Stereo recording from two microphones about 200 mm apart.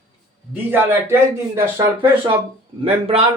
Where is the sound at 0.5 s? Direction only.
10° right (ahead or behind).